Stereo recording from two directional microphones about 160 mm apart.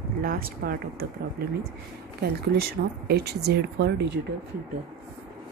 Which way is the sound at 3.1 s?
85° right.